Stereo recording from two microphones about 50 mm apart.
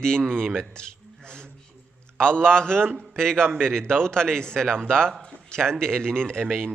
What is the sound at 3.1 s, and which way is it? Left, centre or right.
A man's voice, centre.